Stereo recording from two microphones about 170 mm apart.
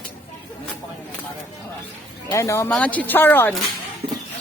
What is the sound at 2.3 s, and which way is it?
A woman's voice, 15° left (ahead or behind).